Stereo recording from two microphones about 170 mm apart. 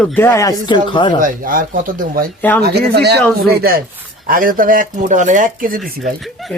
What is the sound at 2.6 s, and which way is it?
Speech, 70° right (ahead or behind).